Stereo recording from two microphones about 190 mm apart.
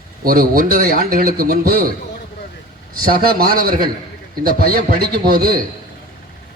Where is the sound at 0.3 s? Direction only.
50° right (ahead or behind).